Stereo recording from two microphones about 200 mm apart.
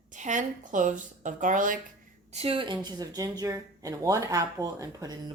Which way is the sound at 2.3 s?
30° right (ahead or behind).